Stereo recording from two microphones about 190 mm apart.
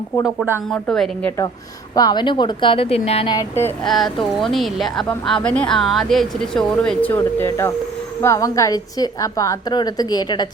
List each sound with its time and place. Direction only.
0.7 s speech: 5° left (ahead or behind)
2.0 s a woman's voice: 20° left (ahead or behind)
3.3 s speech: 15° left (ahead or behind)
3.8 s a woman's voice: centre (ahead or behind); by 10.5 s 20° left (ahead or behind)